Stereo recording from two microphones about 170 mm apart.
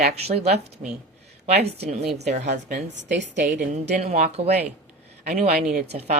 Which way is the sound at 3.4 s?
45° right (ahead or behind).